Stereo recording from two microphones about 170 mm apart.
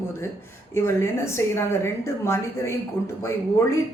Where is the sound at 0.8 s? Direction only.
15° left (ahead or behind).